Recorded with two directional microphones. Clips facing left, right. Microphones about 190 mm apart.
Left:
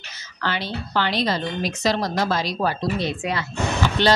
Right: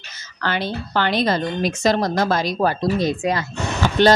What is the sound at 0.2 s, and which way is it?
A woman's voice, 50° right (ahead or behind).